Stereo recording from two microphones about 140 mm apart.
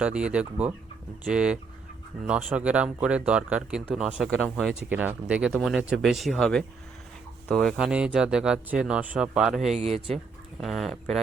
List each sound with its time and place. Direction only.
0.0 s speech: 10° right (ahead or behind)
4.3 s speech: 5° left (ahead or behind)
4.7 s speech: 10° right (ahead or behind)
9.7 s speech: 45° right (ahead or behind)
10.6 s speech: centre (ahead or behind)